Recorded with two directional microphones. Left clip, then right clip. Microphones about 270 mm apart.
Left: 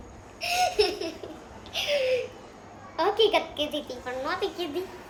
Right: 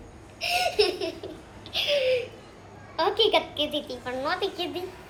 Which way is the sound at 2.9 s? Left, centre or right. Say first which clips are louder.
Even; centre.